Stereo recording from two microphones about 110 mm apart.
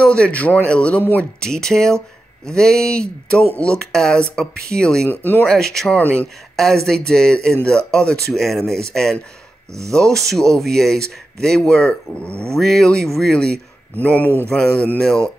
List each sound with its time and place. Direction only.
0.0 s speech: 10° left (ahead or behind)
5.5 s speech: 5° left (ahead or behind)
6.5 s speech: 5° left (ahead or behind)